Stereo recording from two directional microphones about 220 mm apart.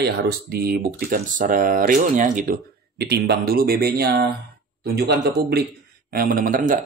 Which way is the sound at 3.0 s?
45° right (ahead or behind).